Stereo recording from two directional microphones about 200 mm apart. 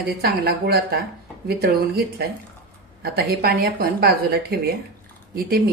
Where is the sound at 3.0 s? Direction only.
50° right (ahead or behind).